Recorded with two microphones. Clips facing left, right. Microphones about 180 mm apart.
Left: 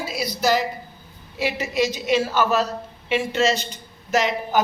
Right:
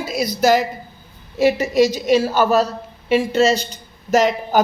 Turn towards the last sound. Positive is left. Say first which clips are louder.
# right 5 dB
turn(degrees=-45)  # may be behind; listen again after turning